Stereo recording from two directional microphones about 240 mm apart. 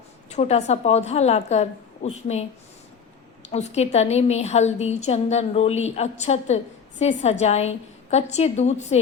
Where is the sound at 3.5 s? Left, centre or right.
Left.